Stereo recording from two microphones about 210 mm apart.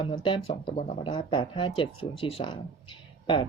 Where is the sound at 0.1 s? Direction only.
20° left (ahead or behind).